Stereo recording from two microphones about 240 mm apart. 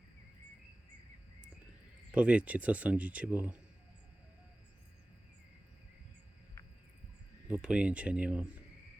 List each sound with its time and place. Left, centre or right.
2.1 s speech: centre
7.4 s speech: centre